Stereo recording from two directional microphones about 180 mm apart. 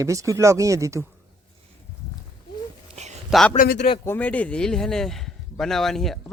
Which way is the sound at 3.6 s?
55° left (ahead or behind).